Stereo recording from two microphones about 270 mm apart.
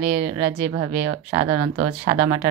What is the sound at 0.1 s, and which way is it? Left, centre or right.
Speech, right.